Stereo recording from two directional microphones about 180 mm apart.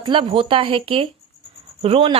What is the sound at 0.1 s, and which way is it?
Speech, 30° right (ahead or behind).